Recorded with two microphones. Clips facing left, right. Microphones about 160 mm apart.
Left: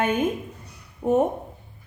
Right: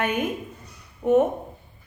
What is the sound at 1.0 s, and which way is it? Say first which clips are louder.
Speech: right 2 dB; 30° left (ahead or behind).